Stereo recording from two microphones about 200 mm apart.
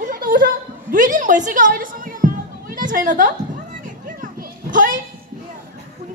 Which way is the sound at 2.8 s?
40° right (ahead or behind).